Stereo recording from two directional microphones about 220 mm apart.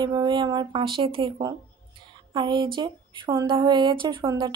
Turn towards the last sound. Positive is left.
turn(degrees=-20)  # may be behind; listen again after turning